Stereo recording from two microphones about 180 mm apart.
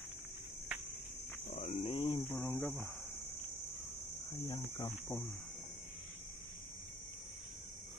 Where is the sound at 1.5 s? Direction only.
35° left (ahead or behind).